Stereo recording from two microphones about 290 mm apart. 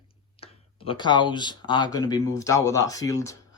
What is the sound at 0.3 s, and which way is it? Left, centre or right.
Speech, centre.